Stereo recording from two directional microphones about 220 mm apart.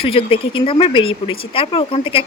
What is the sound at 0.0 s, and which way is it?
Speech, 25° left (ahead or behind).